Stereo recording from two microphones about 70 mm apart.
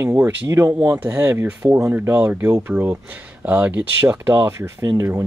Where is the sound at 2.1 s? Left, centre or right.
Right.